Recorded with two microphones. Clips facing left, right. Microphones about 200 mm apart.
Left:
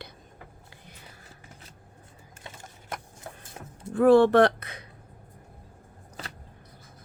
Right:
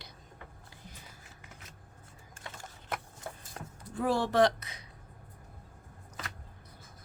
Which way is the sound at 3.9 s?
60° left (ahead or behind).